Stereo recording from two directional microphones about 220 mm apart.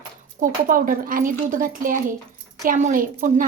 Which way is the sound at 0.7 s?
40° right (ahead or behind).